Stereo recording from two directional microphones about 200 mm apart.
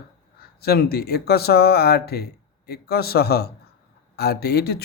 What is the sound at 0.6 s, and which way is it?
Speech, 50° left (ahead or behind).